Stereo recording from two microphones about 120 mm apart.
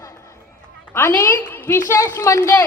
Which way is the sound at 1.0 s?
25° left (ahead or behind).